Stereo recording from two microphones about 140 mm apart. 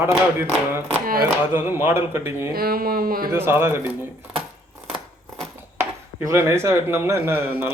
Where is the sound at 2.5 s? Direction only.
90° right.